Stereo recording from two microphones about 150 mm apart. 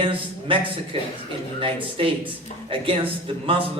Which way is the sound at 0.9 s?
35° right (ahead or behind).